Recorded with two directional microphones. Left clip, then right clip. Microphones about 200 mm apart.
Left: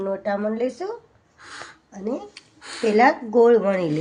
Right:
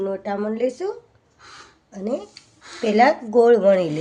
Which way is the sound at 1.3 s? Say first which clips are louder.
Left 4 dB; 45° left (ahead or behind).